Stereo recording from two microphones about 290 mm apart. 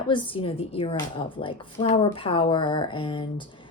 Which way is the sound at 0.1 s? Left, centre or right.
Centre.